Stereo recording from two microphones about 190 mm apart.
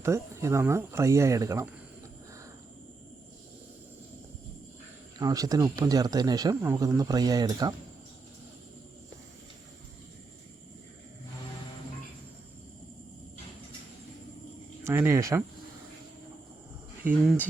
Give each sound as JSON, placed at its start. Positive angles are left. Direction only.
{"t": 0.0, "sound": "speech", "side_deg": -15}
{"t": 5.1, "sound": "speech", "side_deg": -20}
{"t": 14.8, "sound": "speech", "side_deg": -15}
{"t": 17.1, "sound": "speech", "side_deg": -5}